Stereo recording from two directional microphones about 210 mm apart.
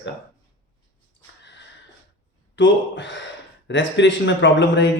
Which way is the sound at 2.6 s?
60° left (ahead or behind).